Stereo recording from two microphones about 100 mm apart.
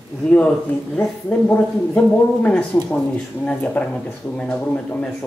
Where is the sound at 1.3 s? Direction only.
15° left (ahead or behind).